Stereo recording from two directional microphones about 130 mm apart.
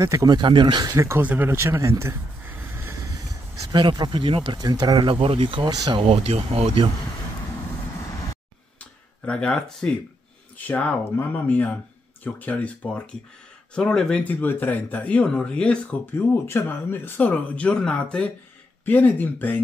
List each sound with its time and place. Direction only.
0.0 s speech: 25° right (ahead or behind)
0.8 s speech: 20° right (ahead or behind)
3.6 s speech: 30° right (ahead or behind)
8.7 s a sound: 10° left (ahead or behind)
10.7 s speech: 10° left (ahead or behind)